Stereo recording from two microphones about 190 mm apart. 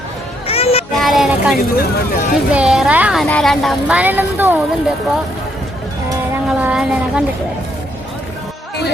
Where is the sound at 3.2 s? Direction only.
5° left (ahead or behind).